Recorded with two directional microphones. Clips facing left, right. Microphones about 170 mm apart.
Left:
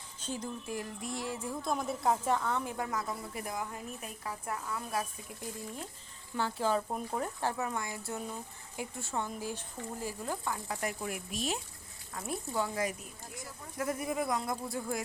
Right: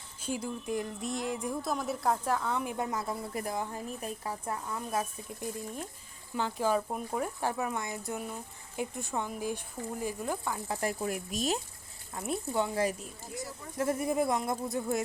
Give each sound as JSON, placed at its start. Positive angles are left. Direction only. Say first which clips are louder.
{"t": 0.2, "sound": "a woman's voice", "louder": "right 4 dB", "side_deg": -10}
{"t": 0.7, "sound": "speech", "louder": "right 7 dB", "side_deg": -20}
{"t": 1.6, "sound": "a woman's voice", "louder": "left 1 dB", "side_deg": 0}
{"t": 2.4, "sound": "speech", "louder": "right 2 dB", "side_deg": -10}
{"t": 10.7, "sound": "speech", "louder": "right 8 dB", "side_deg": -30}
{"t": 12.1, "sound": "speech", "louder": "right 4 dB", "side_deg": -20}